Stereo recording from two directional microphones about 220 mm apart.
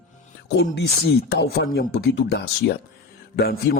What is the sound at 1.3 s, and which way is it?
Mantra, 45° left (ahead or behind).